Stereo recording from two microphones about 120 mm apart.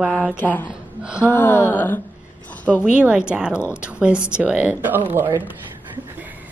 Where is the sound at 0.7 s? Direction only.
10° right (ahead or behind).